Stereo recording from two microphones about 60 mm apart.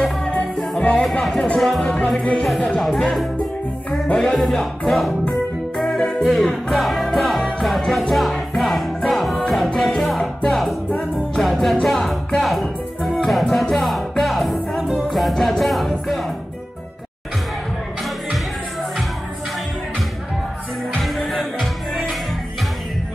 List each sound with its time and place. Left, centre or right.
0.3 s music: centre
1.2 s speech: centre
5.8 s music: centre
21.0 s music: centre